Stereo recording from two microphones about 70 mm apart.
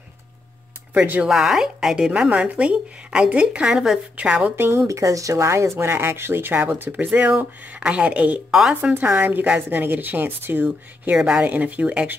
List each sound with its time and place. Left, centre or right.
0.9 s a woman's voice: right
1.2 s a woman's voice: centre
4.6 s a woman's voice: right
8.5 s a woman's voice: centre
8.9 s a woman's voice: right
11.1 s a woman's voice: centre